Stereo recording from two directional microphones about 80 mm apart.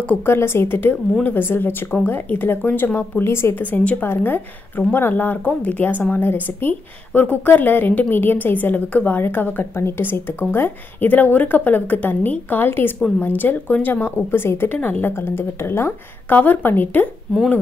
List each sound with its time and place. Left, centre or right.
0.0 s speech: centre
0.3 s a woman's voice: left